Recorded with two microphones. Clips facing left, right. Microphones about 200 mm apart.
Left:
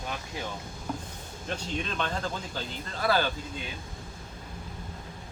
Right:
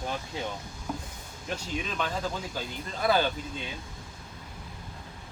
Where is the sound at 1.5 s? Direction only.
5° right (ahead or behind).